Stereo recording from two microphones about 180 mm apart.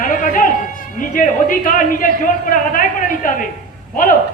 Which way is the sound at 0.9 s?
50° left (ahead or behind).